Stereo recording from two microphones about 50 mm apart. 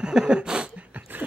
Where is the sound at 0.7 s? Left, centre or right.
Right.